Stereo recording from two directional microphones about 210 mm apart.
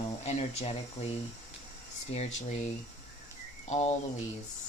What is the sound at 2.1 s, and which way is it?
Speech, 30° left (ahead or behind).